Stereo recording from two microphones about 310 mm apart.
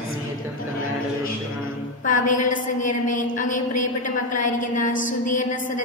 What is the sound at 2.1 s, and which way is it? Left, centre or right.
A woman's voice, left.